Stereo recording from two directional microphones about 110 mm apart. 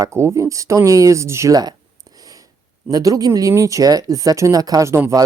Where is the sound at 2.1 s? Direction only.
35° right (ahead or behind).